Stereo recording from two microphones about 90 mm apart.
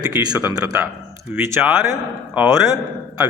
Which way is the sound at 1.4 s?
30° right (ahead or behind).